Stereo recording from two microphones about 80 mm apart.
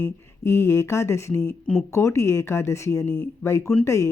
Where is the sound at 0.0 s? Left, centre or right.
Left.